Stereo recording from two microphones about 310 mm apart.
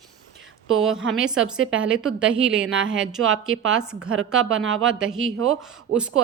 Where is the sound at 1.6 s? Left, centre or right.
Right.